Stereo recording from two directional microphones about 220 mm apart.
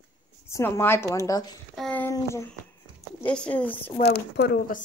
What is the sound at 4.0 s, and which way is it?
Speech, 45° left (ahead or behind).